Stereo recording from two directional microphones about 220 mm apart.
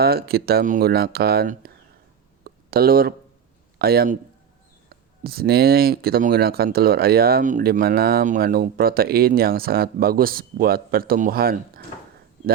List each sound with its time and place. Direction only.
0.0 s speech: 45° right (ahead or behind)
2.4 s a sound: 45° right (ahead or behind)
3.8 s a man's voice: 45° right (ahead or behind)